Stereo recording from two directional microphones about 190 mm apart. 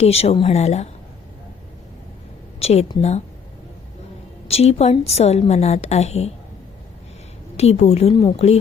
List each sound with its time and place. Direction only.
0.0 s a woman's voice: 30° left (ahead or behind)
2.6 s a woman's voice: 35° left (ahead or behind)
4.4 s a woman's voice: 35° left (ahead or behind)
7.5 s a woman's voice: 35° left (ahead or behind)